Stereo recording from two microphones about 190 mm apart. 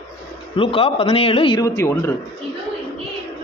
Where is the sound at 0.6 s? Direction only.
30° left (ahead or behind).